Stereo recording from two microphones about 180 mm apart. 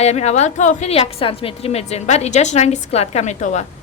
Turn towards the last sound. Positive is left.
turn(degrees=40)  # may be behind; listen again after turning